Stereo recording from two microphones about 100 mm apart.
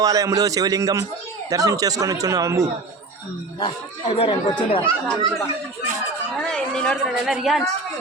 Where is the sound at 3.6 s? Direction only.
65° left (ahead or behind).